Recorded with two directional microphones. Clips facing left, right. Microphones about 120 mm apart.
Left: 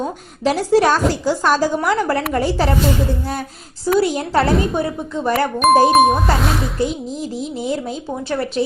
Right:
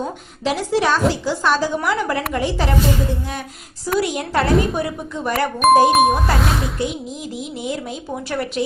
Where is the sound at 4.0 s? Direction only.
30° left (ahead or behind).